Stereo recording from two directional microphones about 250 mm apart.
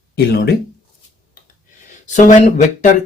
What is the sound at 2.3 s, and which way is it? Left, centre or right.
Speech, left.